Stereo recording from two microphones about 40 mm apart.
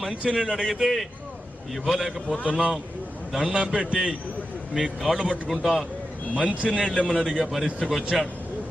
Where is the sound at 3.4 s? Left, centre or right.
Centre.